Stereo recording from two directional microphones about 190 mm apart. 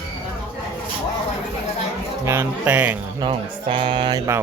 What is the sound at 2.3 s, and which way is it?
Speech, 10° right (ahead or behind).